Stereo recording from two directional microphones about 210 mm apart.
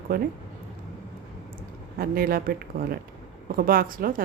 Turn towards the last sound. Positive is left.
turn(degrees=-40)  # may be behind; listen again after turning